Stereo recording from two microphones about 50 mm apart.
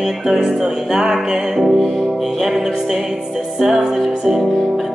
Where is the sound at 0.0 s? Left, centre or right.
Centre.